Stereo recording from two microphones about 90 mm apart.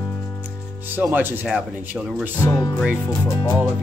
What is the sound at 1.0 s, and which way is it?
Speech, 20° right (ahead or behind).